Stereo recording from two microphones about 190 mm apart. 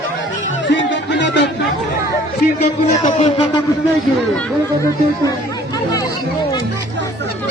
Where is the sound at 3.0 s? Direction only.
35° left (ahead or behind).